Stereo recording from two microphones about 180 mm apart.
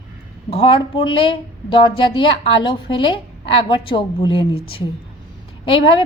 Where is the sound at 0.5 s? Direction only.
30° left (ahead or behind).